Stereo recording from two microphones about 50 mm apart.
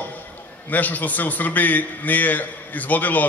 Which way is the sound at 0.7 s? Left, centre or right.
Left.